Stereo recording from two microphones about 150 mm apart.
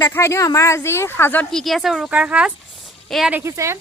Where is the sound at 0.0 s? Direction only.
15° left (ahead or behind); by 3.3 s centre (ahead or behind).